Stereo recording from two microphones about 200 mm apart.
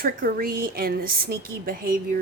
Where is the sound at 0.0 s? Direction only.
45° right (ahead or behind).